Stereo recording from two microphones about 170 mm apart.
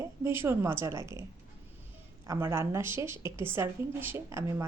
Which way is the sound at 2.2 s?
15° right (ahead or behind).